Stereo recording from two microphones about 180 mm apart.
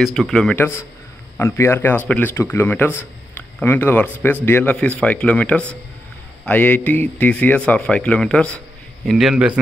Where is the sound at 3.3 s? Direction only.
10° left (ahead or behind).